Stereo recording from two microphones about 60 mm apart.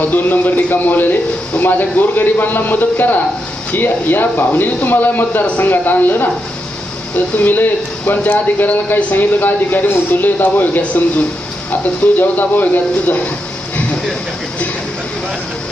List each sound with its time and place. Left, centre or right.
0.0 s speech: left
7.3 s speech: left